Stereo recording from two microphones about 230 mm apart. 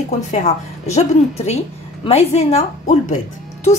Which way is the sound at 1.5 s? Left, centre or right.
Left.